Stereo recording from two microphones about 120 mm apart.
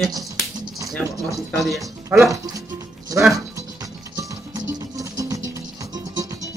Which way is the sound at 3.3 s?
30° right (ahead or behind).